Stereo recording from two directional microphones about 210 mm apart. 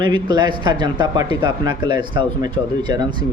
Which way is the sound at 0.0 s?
20° right (ahead or behind).